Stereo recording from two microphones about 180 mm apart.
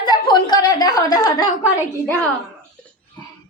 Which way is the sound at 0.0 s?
25° left (ahead or behind).